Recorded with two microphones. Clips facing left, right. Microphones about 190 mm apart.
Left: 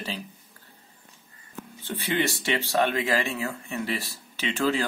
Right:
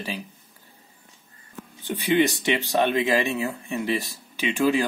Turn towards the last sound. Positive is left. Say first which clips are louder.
# right 4 dB
turn(degrees=-15)  # may be behind; listen again after turning